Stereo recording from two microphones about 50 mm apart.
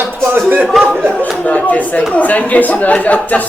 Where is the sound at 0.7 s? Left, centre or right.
Centre.